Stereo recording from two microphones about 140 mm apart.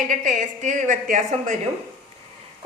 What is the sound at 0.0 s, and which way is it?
A woman's voice, 65° right (ahead or behind).